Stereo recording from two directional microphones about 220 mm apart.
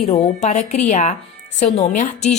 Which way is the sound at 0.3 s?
35° left (ahead or behind).